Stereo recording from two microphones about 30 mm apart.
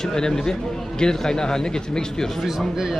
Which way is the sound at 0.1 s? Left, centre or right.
Left.